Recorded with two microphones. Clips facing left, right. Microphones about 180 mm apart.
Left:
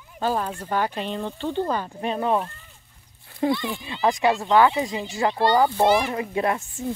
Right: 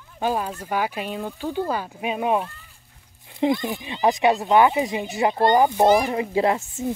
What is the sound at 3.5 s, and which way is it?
Speech, 45° right (ahead or behind).